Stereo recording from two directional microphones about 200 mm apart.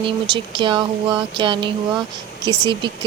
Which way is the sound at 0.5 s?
25° right (ahead or behind).